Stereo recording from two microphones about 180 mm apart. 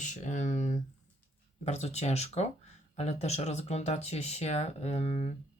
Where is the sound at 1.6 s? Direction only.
35° left (ahead or behind).